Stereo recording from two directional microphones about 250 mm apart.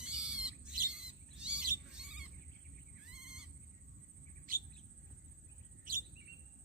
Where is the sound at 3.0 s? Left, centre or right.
Centre.